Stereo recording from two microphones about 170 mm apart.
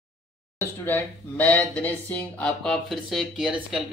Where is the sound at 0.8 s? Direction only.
10° left (ahead or behind).